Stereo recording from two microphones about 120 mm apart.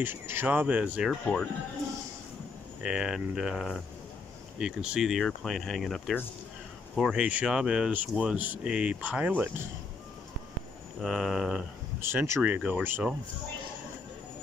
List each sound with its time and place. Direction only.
0.0 s speech: 15° right (ahead or behind)
2.8 s speech: 5° right (ahead or behind)
11.0 s speech: centre (ahead or behind)
12.0 s speech: 20° right (ahead or behind)